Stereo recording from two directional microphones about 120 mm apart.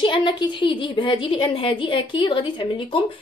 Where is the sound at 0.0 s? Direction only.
40° left (ahead or behind).